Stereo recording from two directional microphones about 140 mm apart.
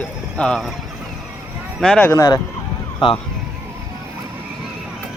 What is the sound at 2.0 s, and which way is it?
Speech, 20° left (ahead or behind).